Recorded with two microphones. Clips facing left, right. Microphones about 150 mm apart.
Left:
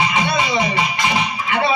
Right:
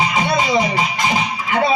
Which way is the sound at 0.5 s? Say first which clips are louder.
Right 2 dB; 45° right (ahead or behind).